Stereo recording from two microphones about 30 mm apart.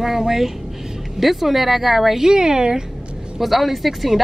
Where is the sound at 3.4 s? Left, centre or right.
Centre.